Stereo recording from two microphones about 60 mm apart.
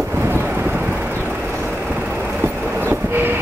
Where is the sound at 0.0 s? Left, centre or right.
Right.